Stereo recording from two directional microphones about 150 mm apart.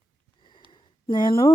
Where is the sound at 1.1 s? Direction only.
30° left (ahead or behind).